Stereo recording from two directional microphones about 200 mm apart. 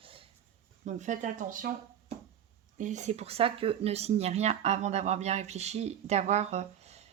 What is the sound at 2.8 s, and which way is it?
Speech, 35° right (ahead or behind).